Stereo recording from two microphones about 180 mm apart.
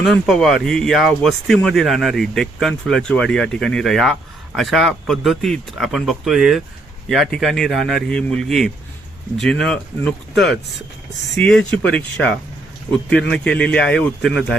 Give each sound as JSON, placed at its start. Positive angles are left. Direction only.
{"t": 0.0, "sound": "a man's voice", "side_deg": 0}